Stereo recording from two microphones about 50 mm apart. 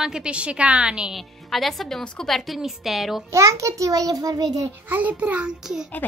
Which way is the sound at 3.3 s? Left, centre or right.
Right.